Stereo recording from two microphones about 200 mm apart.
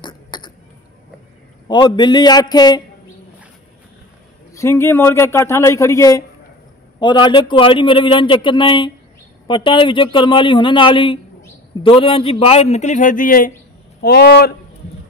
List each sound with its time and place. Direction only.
0.0 s throat clearing: 20° left (ahead or behind)
1.7 s a man's voice: 20° left (ahead or behind)
4.5 s a man's voice: 15° left (ahead or behind); by 14.5 s 55° left (ahead or behind)